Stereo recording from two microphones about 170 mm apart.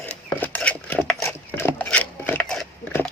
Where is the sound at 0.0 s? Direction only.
10° left (ahead or behind).